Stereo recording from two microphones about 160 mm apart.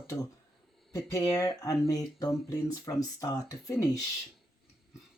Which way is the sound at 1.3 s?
20° left (ahead or behind).